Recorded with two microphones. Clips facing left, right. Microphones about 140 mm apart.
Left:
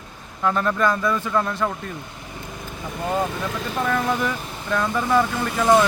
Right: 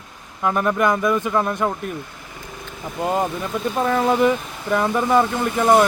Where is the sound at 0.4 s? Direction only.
15° right (ahead or behind).